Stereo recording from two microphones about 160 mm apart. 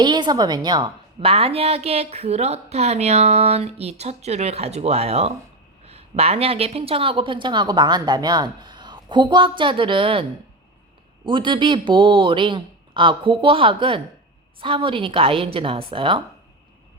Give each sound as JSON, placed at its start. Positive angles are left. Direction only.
{"t": 0.0, "sound": "a woman's voice", "side_deg": -25}
{"t": 11.3, "sound": "a woman's voice", "side_deg": -30}